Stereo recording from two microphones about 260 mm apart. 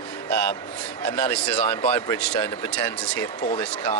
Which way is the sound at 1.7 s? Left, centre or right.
Centre.